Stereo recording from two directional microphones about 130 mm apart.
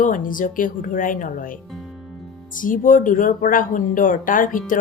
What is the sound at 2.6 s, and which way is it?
Speech, 90° left.